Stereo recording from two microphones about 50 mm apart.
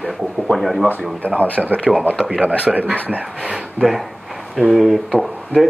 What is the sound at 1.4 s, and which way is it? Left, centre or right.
Speech, right.